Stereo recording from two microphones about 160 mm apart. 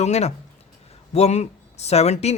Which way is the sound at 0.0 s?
45° left (ahead or behind).